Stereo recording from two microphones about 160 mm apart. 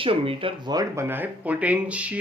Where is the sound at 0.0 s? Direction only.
35° right (ahead or behind).